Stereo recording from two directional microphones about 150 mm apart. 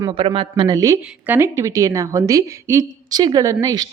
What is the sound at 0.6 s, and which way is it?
A woman's voice, 25° right (ahead or behind).